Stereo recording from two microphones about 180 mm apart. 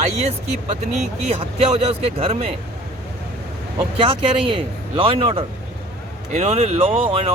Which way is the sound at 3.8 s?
30° right (ahead or behind).